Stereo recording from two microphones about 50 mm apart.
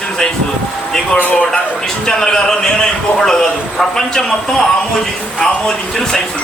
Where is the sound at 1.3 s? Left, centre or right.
Left.